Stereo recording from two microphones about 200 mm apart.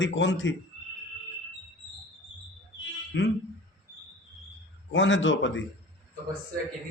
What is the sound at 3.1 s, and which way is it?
Speech, 65° left (ahead or behind).